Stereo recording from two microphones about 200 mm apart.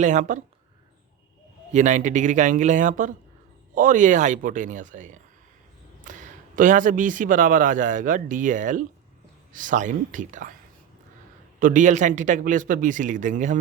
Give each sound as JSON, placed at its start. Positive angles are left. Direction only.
{"t": 0.0, "sound": "a man's voice", "side_deg": -40}
{"t": 1.7, "sound": "a man's voice", "side_deg": -40}
{"t": 11.6, "sound": "a man's voice", "side_deg": -40}